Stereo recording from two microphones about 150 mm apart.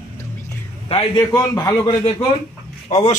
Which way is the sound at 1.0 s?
25° left (ahead or behind).